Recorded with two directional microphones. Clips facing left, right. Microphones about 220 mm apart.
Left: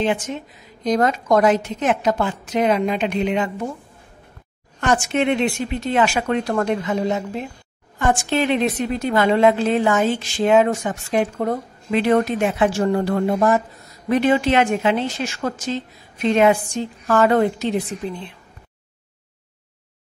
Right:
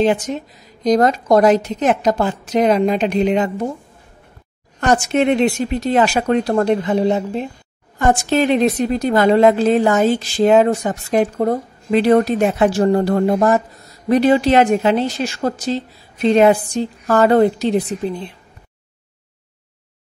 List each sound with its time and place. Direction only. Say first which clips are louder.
0.0 s a woman's voice: right 5 dB; 40° right (ahead or behind)
4.7 s a woman's voice: right 4 dB; 40° right (ahead or behind)